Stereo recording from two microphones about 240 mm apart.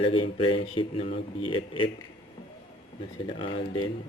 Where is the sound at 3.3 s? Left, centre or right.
Left.